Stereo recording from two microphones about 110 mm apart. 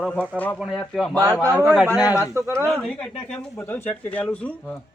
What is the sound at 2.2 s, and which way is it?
Speech, 25° right (ahead or behind).